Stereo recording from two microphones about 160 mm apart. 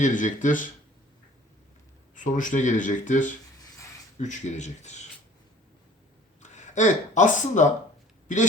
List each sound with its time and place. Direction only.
0.0 s speech: 55° left (ahead or behind)
2.1 s speech: 55° left (ahead or behind)
6.4 s speech: 50° left (ahead or behind)